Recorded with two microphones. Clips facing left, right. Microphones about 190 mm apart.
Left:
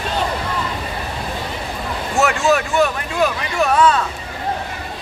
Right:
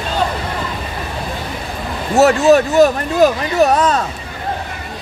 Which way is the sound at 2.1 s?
40° right (ahead or behind).